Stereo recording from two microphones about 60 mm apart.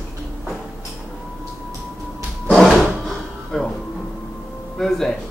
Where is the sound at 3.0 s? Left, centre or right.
Centre.